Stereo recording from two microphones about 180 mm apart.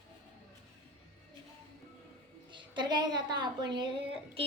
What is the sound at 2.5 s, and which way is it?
A woman's voice, 25° right (ahead or behind).